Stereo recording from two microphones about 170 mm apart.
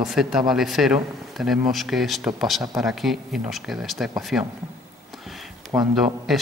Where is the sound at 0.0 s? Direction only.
5° right (ahead or behind).